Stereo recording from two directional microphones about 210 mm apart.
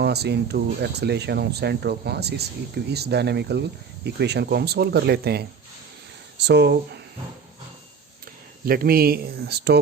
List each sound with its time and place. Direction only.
0.0 s speech: 50° right (ahead or behind)
8.6 s speech: 45° right (ahead or behind)